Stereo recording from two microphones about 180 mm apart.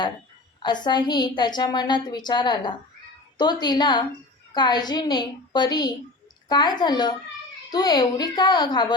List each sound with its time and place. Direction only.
0.6 s a woman's voice: 25° left (ahead or behind)